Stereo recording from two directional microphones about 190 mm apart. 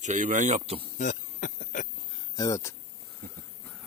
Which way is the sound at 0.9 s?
40° left (ahead or behind).